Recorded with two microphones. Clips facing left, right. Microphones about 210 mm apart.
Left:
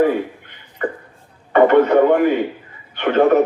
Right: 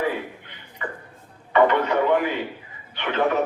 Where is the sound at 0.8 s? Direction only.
50° left (ahead or behind).